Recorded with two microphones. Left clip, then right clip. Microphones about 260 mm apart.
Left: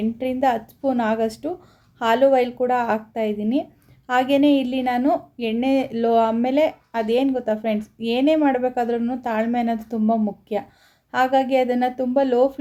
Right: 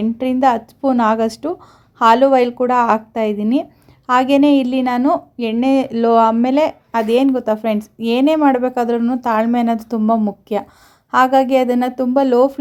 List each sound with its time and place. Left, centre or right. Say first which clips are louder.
0.0 s speech: right 6 dB; right